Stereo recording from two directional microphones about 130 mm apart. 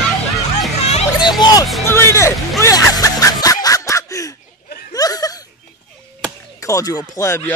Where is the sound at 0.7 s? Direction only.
55° left (ahead or behind).